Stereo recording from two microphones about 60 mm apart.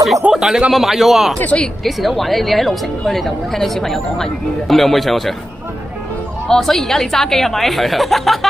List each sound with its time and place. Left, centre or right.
0.3 s speech: centre
1.4 s speech: left
1.9 s speech: centre
6.4 s speech: centre